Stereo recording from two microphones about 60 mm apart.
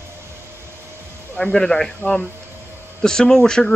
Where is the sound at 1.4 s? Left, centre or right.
Centre.